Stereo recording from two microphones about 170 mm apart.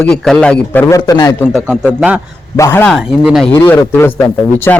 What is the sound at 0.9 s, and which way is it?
Speech, 20° left (ahead or behind).